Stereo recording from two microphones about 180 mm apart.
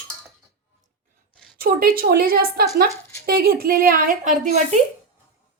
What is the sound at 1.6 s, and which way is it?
A woman's voice, 55° right (ahead or behind).